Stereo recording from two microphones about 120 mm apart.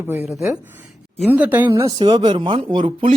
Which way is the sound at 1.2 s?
15° right (ahead or behind).